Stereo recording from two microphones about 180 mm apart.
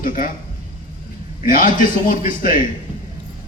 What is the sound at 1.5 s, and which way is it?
A man's voice, 45° left (ahead or behind).